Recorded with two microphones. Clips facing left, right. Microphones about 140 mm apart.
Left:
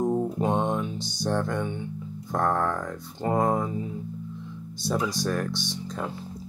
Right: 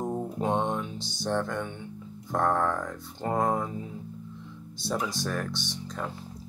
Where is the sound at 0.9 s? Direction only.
25° right (ahead or behind).